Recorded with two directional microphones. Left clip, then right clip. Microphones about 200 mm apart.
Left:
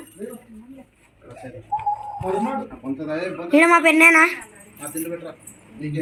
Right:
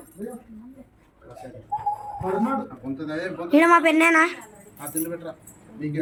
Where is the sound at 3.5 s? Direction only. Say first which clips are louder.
Left 2 dB; centre (ahead or behind).